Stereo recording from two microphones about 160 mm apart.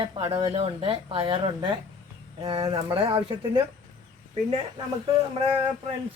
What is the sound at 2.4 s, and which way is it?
Speech, 30° right (ahead or behind).